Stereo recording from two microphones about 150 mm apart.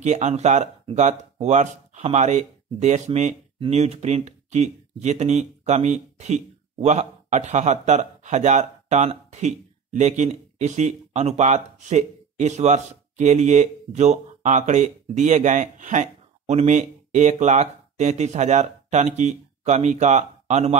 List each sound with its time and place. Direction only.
0.0 s speech: 50° right (ahead or behind)
3.5 s speech: 40° right (ahead or behind)